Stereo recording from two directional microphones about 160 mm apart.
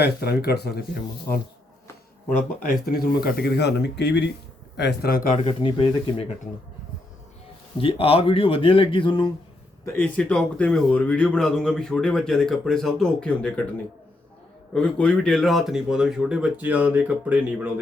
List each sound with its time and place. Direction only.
0.0 s speech: 80° left
2.8 s speech: 70° left (ahead or behind); by 4.3 s 90° left
4.8 s speech: 80° left; by 5.4 s 60° left (ahead or behind)
5.4 s speech: 30° left (ahead or behind)
7.8 s speech: 35° left (ahead or behind)
9.8 s speech: 10° left (ahead or behind)
14.7 s speech: 5° left (ahead or behind); by 17.7 s 10° right (ahead or behind)